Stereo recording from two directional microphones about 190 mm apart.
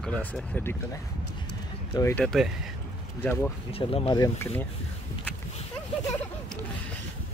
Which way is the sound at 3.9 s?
25° left (ahead or behind).